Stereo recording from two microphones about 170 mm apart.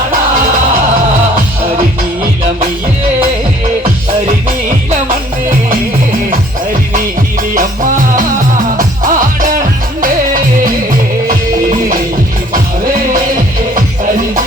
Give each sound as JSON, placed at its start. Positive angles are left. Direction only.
{"t": 7.5, "sound": "music", "side_deg": -50}